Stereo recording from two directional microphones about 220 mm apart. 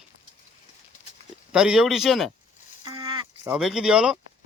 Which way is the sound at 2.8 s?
20° right (ahead or behind).